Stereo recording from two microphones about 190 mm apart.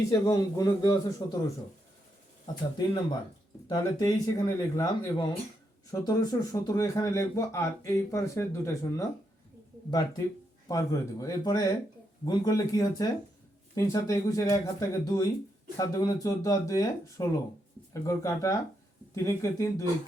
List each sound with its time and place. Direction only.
0.1 s speech: 20° left (ahead or behind)
2.7 s a man's voice: 25° left (ahead or behind)
10.7 s a man's voice: 15° left (ahead or behind)